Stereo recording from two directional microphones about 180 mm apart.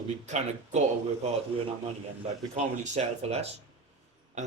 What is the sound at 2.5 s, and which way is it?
Speech, 40° right (ahead or behind).